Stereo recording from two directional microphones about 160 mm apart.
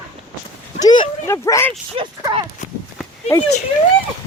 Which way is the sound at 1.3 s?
15° left (ahead or behind).